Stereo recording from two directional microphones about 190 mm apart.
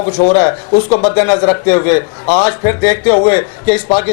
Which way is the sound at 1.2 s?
15° left (ahead or behind).